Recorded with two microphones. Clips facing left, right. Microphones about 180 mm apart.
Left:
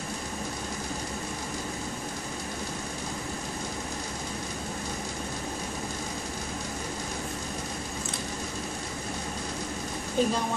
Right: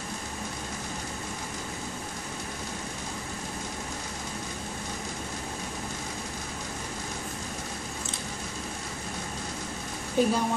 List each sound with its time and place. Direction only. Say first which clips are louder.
10.2 s a woman's voice: right 2 dB; 10° right (ahead or behind)